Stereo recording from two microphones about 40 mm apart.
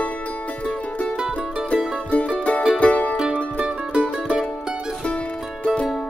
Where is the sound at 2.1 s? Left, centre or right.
Left.